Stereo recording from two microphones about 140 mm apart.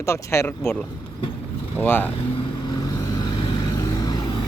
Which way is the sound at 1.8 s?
15° left (ahead or behind).